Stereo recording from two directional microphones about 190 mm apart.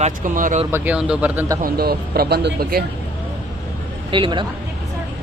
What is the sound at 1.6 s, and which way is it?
Speech, 55° right (ahead or behind).